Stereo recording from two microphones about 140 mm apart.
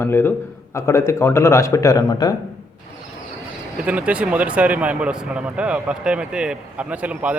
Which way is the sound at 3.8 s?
10° right (ahead or behind).